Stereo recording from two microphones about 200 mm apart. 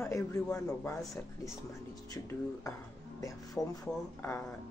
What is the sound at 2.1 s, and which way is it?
A woman's voice, 15° left (ahead or behind).